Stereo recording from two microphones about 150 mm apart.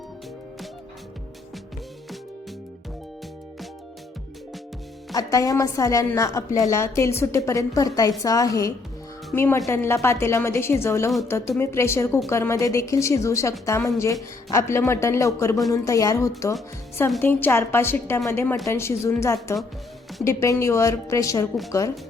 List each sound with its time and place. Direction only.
5.1 s a woman's voice: 20° left (ahead or behind)